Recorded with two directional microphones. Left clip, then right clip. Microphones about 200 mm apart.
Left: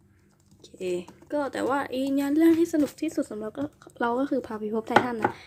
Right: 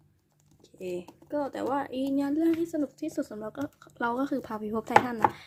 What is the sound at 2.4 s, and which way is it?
Speech, 5° left (ahead or behind).